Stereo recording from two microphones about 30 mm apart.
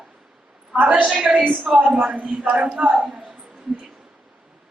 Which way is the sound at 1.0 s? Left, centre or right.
Right.